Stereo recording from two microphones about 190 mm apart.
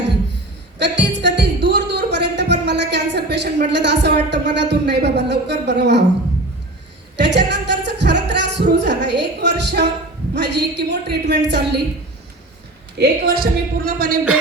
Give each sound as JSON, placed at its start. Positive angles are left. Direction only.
{"t": 0.8, "sound": "music", "side_deg": -65}
{"t": 3.7, "sound": "a man's voice", "side_deg": -65}
{"t": 7.2, "sound": "music", "side_deg": -65}
{"t": 10.3, "sound": "a man's voice", "side_deg": -60}
{"t": 13.0, "sound": "a woman's voice", "side_deg": -50}